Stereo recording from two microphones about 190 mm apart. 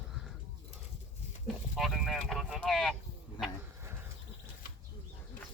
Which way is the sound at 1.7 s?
Centre (ahead or behind).